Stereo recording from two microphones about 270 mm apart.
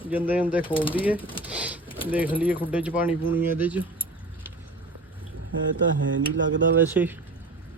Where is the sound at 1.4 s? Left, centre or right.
Centre.